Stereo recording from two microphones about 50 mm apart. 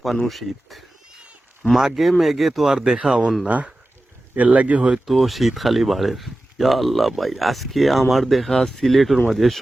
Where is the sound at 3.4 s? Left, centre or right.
Right.